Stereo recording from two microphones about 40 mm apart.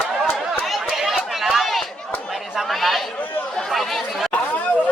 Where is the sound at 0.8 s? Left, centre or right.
Centre.